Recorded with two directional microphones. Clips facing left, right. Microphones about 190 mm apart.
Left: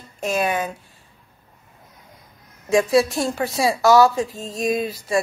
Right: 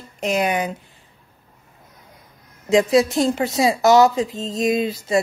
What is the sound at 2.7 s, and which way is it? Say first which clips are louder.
Speech: right 1 dB; 20° right (ahead or behind).